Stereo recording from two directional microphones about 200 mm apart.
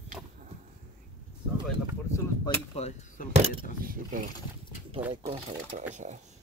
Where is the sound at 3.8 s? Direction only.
45° right (ahead or behind).